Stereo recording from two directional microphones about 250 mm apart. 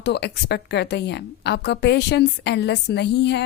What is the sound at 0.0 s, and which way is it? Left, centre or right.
A woman's voice, left.